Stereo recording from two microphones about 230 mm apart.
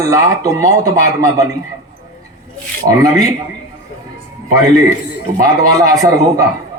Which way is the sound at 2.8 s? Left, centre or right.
Centre.